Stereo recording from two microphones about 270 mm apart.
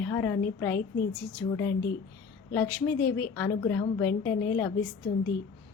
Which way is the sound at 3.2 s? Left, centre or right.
Centre.